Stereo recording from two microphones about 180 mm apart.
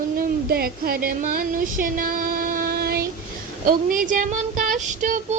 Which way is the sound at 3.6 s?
50° right (ahead or behind).